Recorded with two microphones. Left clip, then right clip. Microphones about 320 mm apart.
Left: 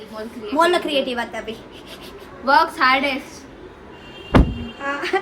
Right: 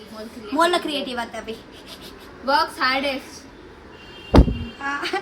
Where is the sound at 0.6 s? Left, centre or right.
Centre.